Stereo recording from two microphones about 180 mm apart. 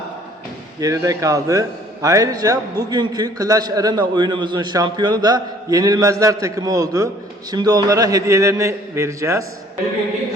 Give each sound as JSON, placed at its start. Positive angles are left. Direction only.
{"t": 0.8, "sound": "a man's voice", "side_deg": -20}